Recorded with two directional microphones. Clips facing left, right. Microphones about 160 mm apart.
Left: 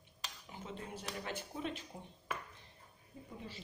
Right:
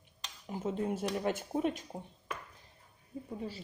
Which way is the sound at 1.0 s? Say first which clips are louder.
Right 10 dB; 50° right (ahead or behind).